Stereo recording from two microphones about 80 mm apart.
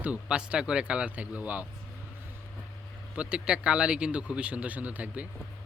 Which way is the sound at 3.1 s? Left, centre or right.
Centre.